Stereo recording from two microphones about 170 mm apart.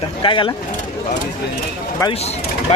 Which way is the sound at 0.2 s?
30° left (ahead or behind).